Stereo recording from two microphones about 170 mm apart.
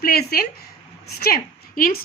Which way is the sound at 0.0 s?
65° left (ahead or behind).